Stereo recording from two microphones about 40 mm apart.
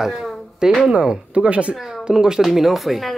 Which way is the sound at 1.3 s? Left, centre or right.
Right.